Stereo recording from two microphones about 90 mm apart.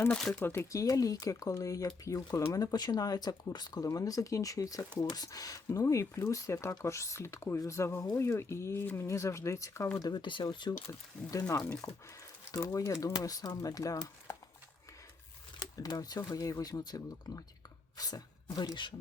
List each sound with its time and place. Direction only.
0.1 s speech: 10° left (ahead or behind)
0.4 s speech: 25° left (ahead or behind)
0.7 s speech: 40° left (ahead or behind)
10.0 s speech: 55° left (ahead or behind)
11.3 s speech: 40° left (ahead or behind)
13.2 s speech: 45° left (ahead or behind)
15.5 s speech: 45° left (ahead or behind)